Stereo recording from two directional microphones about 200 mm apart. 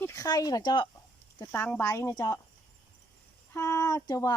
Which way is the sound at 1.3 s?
10° left (ahead or behind).